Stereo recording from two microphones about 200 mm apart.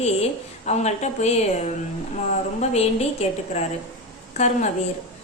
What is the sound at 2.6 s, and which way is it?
A woman's voice, 35° left (ahead or behind).